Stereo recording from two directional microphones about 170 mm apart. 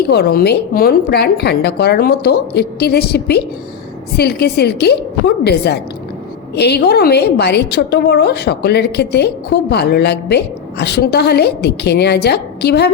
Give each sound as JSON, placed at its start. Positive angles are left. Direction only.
{"t": 0.0, "sound": "a woman's voice", "side_deg": 70}